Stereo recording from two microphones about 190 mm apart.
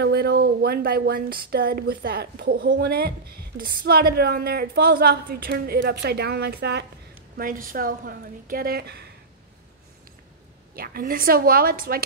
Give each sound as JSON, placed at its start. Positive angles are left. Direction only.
{"t": 0.0, "sound": "speech", "side_deg": -55}
{"t": 7.3, "sound": "a woman's voice", "side_deg": -45}
{"t": 10.8, "sound": "a woman's voice", "side_deg": -50}